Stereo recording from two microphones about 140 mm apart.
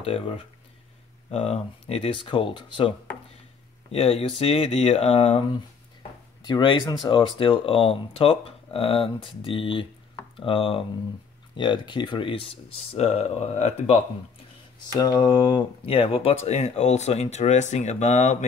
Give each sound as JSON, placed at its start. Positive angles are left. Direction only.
{"t": 1.3, "sound": "speech", "side_deg": 45}
{"t": 3.9, "sound": "speech", "side_deg": 45}
{"t": 14.8, "sound": "speech", "side_deg": 30}